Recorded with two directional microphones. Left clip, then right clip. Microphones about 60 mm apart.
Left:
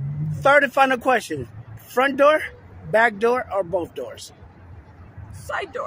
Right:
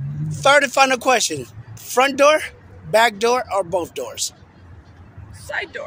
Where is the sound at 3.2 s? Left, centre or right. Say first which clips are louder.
Right 2 dB; left.